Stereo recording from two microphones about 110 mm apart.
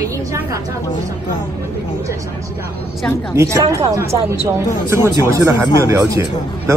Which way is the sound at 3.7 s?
30° right (ahead or behind).